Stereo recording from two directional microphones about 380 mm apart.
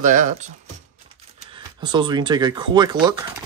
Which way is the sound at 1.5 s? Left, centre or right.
Centre.